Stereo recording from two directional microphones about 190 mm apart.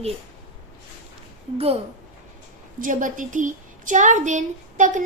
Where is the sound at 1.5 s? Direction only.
30° right (ahead or behind).